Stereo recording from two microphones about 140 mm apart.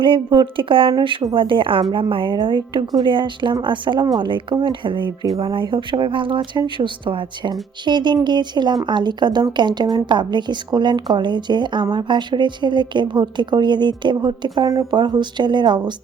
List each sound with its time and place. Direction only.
0.0 s speech: 35° right (ahead or behind)